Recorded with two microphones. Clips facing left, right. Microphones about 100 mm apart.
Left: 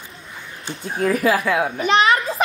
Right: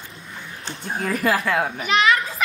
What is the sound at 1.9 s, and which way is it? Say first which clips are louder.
Speech: left 3 dB; 35° left (ahead or behind).